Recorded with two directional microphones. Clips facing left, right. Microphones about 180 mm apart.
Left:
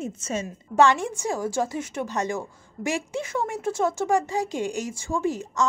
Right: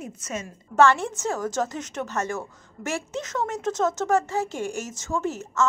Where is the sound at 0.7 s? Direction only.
15° left (ahead or behind).